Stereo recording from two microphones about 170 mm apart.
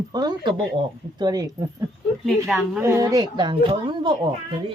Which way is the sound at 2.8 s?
20° right (ahead or behind).